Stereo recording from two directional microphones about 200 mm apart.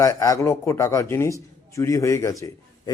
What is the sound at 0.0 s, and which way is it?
A man's voice, 15° left (ahead or behind).